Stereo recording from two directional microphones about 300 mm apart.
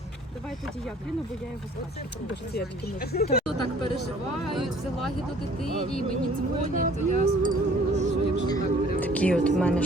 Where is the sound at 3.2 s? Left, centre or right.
Left.